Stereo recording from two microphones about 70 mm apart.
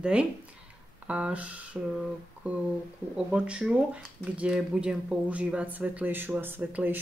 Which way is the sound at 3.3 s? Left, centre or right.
Centre.